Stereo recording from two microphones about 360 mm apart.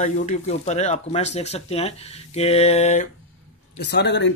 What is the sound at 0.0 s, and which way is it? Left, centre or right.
Speech, centre.